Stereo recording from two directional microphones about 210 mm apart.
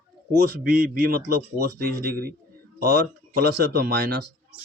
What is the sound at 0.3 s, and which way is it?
A man's voice, 45° right (ahead or behind).